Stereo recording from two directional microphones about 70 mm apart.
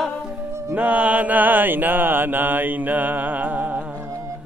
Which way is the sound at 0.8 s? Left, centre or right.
Right.